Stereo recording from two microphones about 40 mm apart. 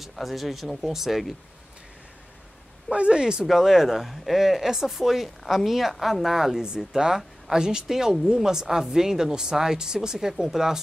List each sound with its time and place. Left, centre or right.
0.0 s speech: centre
2.9 s speech: right
3.4 s speech: centre